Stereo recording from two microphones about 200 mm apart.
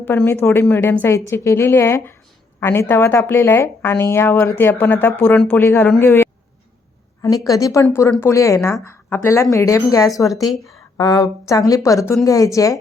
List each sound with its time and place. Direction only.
0.0 s speech: 10° left (ahead or behind)
10.4 s speech: centre (ahead or behind)
10.9 s speech: 20° left (ahead or behind)